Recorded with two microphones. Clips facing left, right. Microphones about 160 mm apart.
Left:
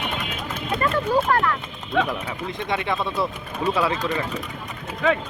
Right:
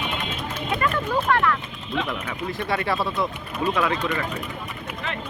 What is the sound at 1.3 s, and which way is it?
Speech, 35° left (ahead or behind).